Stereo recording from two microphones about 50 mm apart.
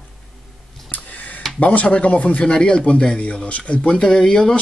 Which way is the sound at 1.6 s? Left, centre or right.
Left.